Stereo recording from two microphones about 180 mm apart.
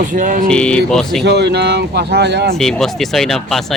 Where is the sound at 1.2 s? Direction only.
65° right (ahead or behind).